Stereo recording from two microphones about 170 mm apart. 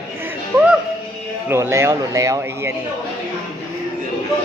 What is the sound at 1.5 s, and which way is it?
Speech, 15° right (ahead or behind).